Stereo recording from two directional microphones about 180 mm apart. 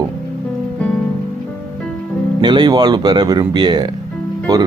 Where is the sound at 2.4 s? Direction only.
25° right (ahead or behind).